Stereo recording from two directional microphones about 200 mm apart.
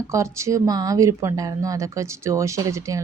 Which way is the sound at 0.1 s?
15° right (ahead or behind).